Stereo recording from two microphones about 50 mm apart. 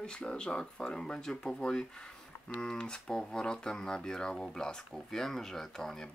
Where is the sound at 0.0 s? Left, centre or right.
Centre.